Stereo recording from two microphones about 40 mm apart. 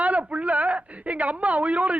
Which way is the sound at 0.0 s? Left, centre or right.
Right.